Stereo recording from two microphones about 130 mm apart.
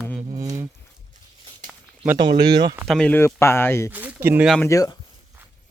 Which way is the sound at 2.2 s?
35° right (ahead or behind).